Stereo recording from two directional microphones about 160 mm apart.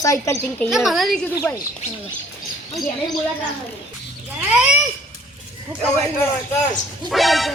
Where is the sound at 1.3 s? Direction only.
20° left (ahead or behind).